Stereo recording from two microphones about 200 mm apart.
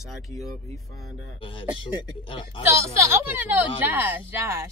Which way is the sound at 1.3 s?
25° left (ahead or behind).